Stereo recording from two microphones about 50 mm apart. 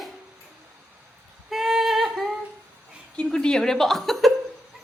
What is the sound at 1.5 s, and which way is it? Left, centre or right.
Singing, centre.